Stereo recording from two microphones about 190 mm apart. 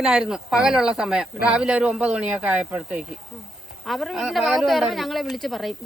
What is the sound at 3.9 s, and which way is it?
Speech, centre (ahead or behind).